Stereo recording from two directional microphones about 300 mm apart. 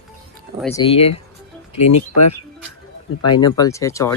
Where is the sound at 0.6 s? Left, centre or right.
Centre.